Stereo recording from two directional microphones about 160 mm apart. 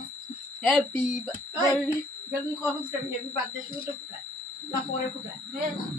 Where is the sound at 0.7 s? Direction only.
Centre (ahead or behind).